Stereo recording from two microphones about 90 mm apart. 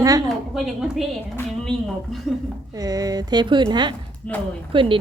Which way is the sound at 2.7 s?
45° right (ahead or behind).